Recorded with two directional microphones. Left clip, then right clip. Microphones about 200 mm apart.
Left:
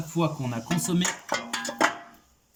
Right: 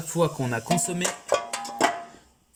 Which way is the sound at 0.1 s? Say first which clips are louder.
Right 4 dB; 40° right (ahead or behind).